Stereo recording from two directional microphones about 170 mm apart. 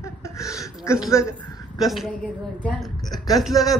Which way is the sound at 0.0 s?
15° left (ahead or behind).